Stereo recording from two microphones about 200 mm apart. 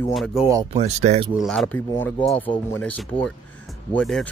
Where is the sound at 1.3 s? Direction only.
Centre (ahead or behind).